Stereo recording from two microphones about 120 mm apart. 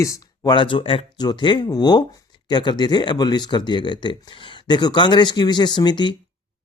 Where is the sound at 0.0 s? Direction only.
30° left (ahead or behind).